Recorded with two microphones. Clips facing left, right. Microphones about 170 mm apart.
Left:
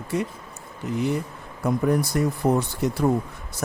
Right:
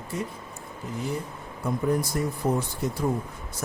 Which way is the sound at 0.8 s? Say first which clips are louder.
Left 6 dB; 80° left.